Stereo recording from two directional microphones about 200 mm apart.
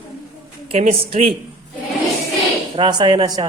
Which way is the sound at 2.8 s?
20° right (ahead or behind).